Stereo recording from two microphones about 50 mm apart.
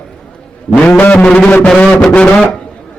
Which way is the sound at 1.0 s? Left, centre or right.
Left.